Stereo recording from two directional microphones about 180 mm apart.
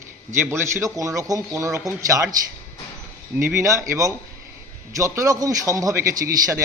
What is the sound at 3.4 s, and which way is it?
A man's voice, 15° right (ahead or behind).